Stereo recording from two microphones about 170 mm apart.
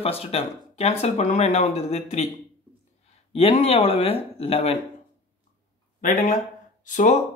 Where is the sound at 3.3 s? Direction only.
35° left (ahead or behind).